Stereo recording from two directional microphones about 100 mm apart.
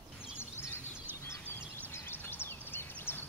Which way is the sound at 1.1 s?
20° right (ahead or behind).